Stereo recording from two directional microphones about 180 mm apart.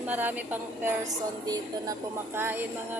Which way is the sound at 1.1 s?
20° right (ahead or behind).